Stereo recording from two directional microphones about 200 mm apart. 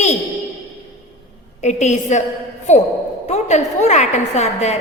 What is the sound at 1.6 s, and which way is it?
A woman's voice, 35° left (ahead or behind).